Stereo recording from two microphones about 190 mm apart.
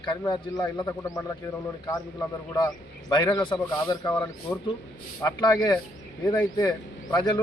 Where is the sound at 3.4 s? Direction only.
25° left (ahead or behind).